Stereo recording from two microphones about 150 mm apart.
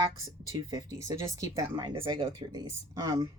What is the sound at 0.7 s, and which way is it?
Speech, 20° right (ahead or behind).